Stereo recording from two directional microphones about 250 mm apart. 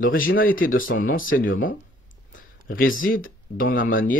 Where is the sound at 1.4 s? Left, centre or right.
Left.